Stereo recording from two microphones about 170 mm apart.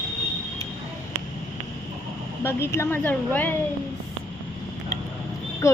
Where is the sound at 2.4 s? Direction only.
15° left (ahead or behind).